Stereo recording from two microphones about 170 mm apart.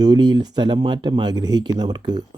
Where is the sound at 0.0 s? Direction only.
25° right (ahead or behind).